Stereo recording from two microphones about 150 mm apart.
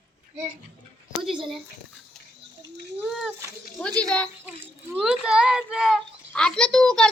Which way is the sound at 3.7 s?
5° left (ahead or behind).